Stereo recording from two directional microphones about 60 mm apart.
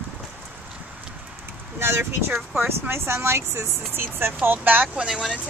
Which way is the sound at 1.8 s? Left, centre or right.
Right.